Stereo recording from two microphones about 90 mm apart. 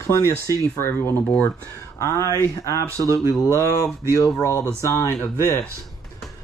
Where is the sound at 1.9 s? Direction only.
35° left (ahead or behind).